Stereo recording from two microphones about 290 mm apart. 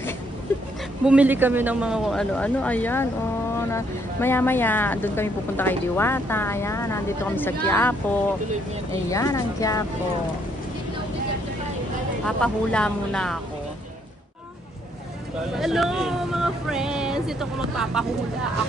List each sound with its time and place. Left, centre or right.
1.0 s speech: centre
8.9 s speech: centre
12.3 s speech: centre
15.5 s speech: centre